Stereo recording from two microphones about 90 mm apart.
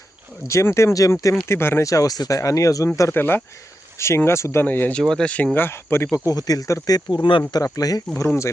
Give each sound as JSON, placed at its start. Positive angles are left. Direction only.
{"t": 0.4, "sound": "speech", "side_deg": 30}
{"t": 1.9, "sound": "speech", "side_deg": 40}
{"t": 3.1, "sound": "speech", "side_deg": 25}
{"t": 4.6, "sound": "speech", "side_deg": 20}
{"t": 4.9, "sound": "speech", "side_deg": 10}
{"t": 5.5, "sound": "speech", "side_deg": 25}
{"t": 6.3, "sound": "speech", "side_deg": 45}
{"t": 7.5, "sound": "speech", "side_deg": 40}